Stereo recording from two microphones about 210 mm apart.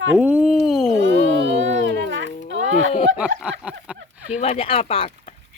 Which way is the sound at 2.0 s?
60° right (ahead or behind).